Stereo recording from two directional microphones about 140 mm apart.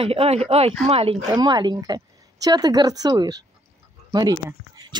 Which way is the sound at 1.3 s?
30° right (ahead or behind).